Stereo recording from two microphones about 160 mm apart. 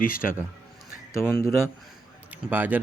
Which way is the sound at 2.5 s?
10° right (ahead or behind).